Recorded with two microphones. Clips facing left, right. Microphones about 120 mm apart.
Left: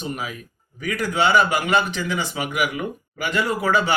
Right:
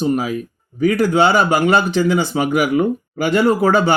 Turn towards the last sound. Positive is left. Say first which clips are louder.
# right 7 dB
turn(degrees=-35)  # may be behind; listen again after turning